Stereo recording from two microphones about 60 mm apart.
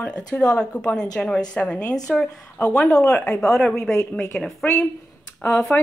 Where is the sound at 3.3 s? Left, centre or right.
Centre.